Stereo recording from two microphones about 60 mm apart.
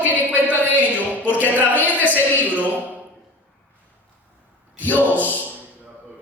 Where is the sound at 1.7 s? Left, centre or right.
Right.